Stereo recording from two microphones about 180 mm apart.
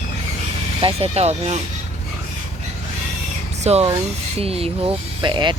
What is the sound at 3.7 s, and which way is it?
Speech, 35° right (ahead or behind).